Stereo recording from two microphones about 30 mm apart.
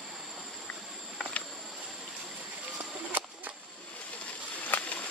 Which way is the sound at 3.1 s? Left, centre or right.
Right.